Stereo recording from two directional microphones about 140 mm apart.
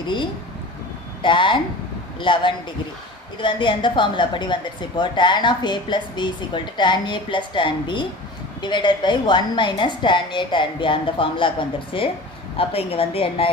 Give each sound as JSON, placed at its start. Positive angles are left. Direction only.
{"t": 1.2, "sound": "a woman's voice", "side_deg": 35}